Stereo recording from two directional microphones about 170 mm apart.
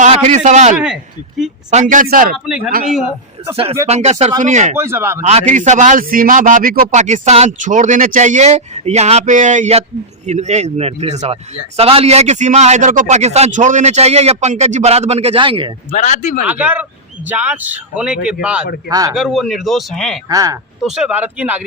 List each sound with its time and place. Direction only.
0.0 s a man's voice: 40° right (ahead or behind)
3.5 s a man's voice: 35° right (ahead or behind)
4.8 s a man's voice: 15° right (ahead or behind)
5.2 s a man's voice: 40° right (ahead or behind)
15.9 s speech: 45° left (ahead or behind)
16.5 s a man's voice: 10° right (ahead or behind)
18.9 s speech: 20° right (ahead or behind)
19.1 s speech: centre (ahead or behind)
20.2 s speech: 20° right (ahead or behind)
20.8 s a man's voice: 5° right (ahead or behind)